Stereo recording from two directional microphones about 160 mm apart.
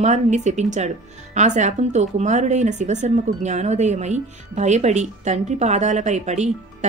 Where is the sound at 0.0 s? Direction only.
45° right (ahead or behind).